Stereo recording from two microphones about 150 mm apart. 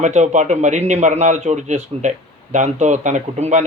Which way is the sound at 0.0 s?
50° right (ahead or behind).